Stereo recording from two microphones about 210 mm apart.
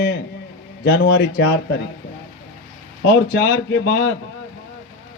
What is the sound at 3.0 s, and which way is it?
A man's voice, 50° left (ahead or behind).